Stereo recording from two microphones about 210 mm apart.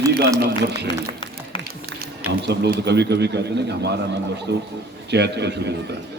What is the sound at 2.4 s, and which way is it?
A man's voice, 55° right (ahead or behind).